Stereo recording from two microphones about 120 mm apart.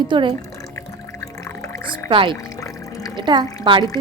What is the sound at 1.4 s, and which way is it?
Music, 25° left (ahead or behind).